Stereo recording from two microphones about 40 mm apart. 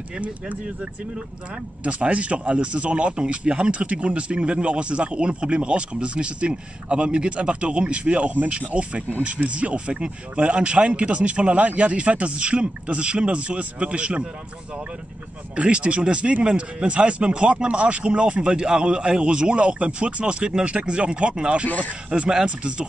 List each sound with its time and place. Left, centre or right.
1.9 s speech: right
15.5 s speech: right
21.6 s speech: left
22.6 s speech: right